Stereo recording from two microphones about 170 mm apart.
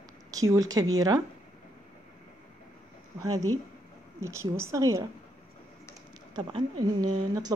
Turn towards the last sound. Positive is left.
turn(degrees=-25)  # may be behind; listen again after turning